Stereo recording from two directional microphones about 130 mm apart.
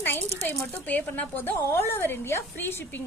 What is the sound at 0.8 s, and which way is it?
A woman's voice, 10° left (ahead or behind).